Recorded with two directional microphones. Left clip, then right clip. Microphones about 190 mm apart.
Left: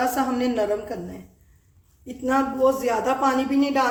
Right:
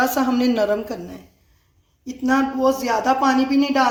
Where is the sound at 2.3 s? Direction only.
30° right (ahead or behind).